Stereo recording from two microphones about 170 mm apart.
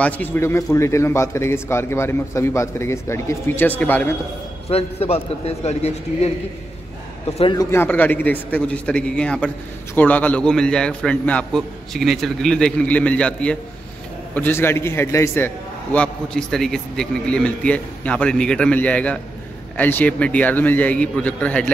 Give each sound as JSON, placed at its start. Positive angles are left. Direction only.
{"t": 0.0, "sound": "a man's voice", "side_deg": 10}
{"t": 4.6, "sound": "a man's voice", "side_deg": 35}
{"t": 7.5, "sound": "a man's voice", "side_deg": 15}